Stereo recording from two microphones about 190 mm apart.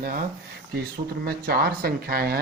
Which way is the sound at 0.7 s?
55° right (ahead or behind).